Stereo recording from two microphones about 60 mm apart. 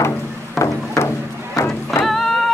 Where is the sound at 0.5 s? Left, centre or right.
Left.